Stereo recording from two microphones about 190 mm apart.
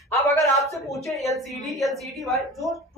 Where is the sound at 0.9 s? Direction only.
Centre (ahead or behind).